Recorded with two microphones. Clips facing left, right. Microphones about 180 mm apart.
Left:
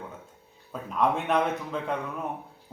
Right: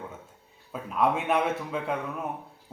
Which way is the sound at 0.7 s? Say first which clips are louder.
Even; 5° right (ahead or behind).